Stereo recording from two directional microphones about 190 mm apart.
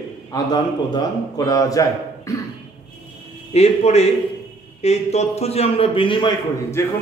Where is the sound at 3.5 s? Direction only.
35° left (ahead or behind).